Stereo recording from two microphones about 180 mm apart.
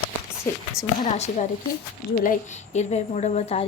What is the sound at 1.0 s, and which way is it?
A woman's voice, 40° left (ahead or behind).